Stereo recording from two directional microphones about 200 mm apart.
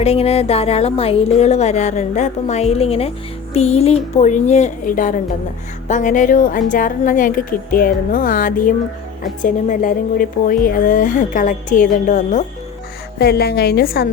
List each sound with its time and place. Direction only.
0.0 s a woman's voice: 30° left (ahead or behind)
13.1 s a woman's voice: 55° left (ahead or behind)